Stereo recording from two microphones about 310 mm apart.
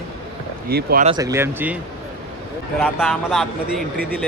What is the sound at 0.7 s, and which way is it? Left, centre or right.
Speech, right.